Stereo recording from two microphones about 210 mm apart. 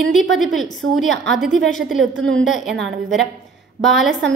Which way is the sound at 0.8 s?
55° right (ahead or behind).